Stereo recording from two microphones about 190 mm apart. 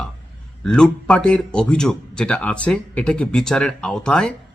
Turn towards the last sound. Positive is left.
turn(degrees=5)  # may be behind; listen again after turning